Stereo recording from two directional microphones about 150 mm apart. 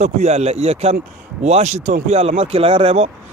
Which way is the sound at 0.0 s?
50° right (ahead or behind).